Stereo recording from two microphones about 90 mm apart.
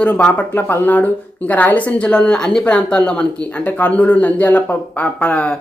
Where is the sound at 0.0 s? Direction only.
10° left (ahead or behind).